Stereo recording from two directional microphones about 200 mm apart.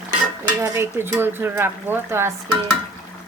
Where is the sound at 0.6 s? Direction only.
15° right (ahead or behind).